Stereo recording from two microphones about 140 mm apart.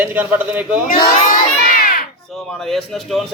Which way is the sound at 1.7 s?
80° left.